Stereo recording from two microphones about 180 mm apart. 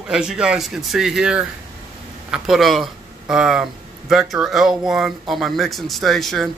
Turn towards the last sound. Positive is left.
turn(degrees=0)  # may be behind; listen again after turning